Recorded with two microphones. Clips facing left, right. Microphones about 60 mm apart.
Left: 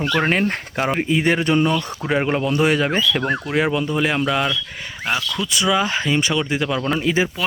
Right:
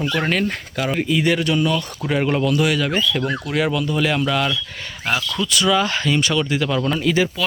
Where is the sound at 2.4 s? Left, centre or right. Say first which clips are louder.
Left 1 dB; left.